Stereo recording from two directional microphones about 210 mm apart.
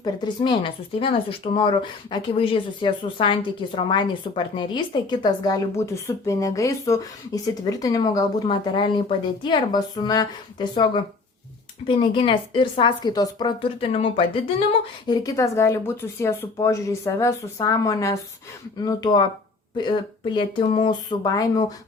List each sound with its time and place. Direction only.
0.0 s a woman's voice: 20° left (ahead or behind)
20.3 s speech: 20° left (ahead or behind)